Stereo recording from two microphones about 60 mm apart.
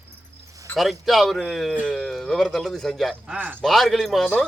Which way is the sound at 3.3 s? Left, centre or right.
Right.